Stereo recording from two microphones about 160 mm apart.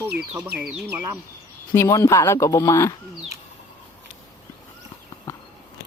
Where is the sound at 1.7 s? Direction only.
20° left (ahead or behind).